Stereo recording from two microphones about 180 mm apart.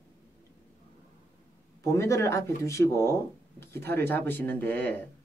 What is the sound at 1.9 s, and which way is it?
Speech, 15° left (ahead or behind).